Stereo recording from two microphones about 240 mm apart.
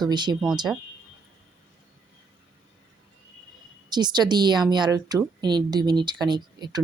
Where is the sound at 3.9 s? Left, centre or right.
Centre.